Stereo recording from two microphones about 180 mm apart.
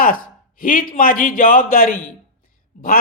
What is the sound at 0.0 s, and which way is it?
A man's voice, 50° left (ahead or behind).